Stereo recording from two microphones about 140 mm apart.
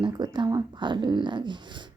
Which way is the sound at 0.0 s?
30° right (ahead or behind).